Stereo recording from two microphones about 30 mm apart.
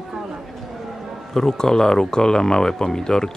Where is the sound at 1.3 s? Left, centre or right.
Centre.